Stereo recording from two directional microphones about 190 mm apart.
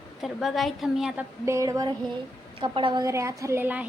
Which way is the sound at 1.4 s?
15° right (ahead or behind).